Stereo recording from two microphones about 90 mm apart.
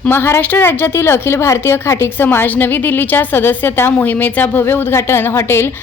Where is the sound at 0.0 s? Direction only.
25° left (ahead or behind).